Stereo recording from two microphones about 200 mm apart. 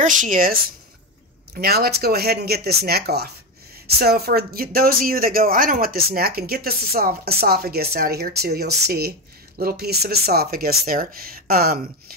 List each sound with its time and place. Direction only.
0.0 s speech: 40° right (ahead or behind)